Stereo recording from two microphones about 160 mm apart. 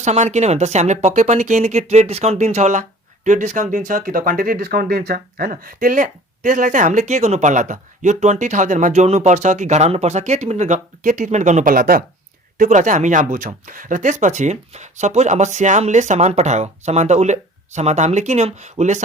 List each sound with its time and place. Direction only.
0.0 s speech: 45° right (ahead or behind)